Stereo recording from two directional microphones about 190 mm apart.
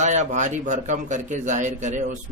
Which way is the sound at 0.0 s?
40° right (ahead or behind).